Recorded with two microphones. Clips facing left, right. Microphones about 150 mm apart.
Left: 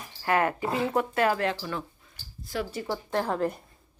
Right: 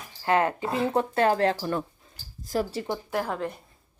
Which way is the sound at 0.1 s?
25° right (ahead or behind).